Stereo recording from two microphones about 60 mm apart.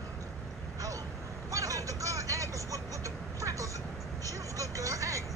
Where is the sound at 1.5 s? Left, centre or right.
Right.